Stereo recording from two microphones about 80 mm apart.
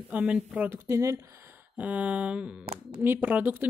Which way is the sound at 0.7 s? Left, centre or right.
Right.